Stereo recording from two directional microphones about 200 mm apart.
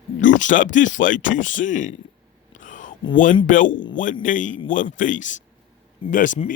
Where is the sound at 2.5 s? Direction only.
40° left (ahead or behind).